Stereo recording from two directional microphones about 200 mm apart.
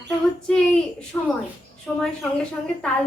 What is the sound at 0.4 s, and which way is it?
Speech, 5° left (ahead or behind).